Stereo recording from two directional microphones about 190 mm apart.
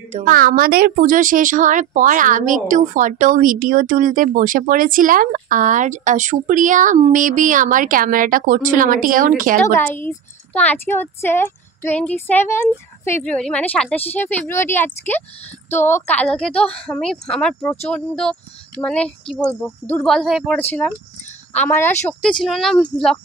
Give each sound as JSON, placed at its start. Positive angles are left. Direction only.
{"t": 0.2, "sound": "a woman's voice", "side_deg": -50}
{"t": 9.7, "sound": "a woman's voice", "side_deg": 10}